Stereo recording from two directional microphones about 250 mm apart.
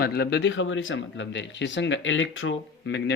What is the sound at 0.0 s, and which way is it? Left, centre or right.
Speech, left.